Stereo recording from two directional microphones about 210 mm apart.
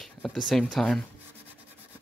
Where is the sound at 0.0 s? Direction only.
Centre (ahead or behind).